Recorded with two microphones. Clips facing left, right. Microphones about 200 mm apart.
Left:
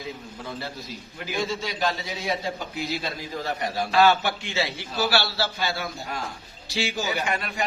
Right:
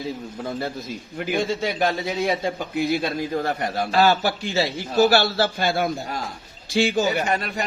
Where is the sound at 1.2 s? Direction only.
55° right (ahead or behind).